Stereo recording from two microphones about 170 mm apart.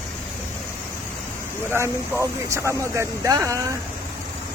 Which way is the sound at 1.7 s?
15° right (ahead or behind).